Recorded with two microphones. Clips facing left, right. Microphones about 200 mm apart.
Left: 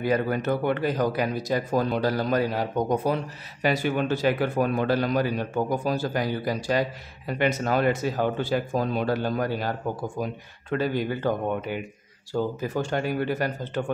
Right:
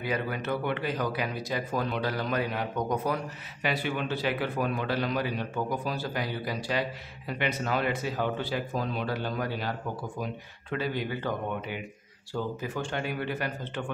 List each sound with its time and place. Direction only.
0.0 s speech: 45° left (ahead or behind)
3.6 s a man's voice: 45° left (ahead or behind)